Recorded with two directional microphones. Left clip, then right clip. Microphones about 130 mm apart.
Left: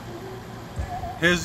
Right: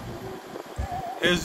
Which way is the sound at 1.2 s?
15° right (ahead or behind).